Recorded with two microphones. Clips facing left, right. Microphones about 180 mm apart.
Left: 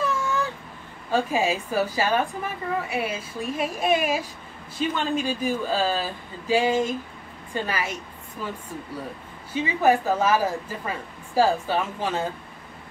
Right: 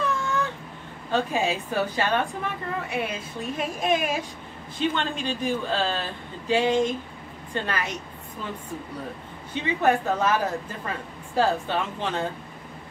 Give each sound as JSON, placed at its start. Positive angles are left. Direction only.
{"t": 0.0, "sound": "a sound", "side_deg": 0}
{"t": 1.1, "sound": "a woman's voice", "side_deg": 5}
{"t": 9.5, "sound": "a woman's voice", "side_deg": 5}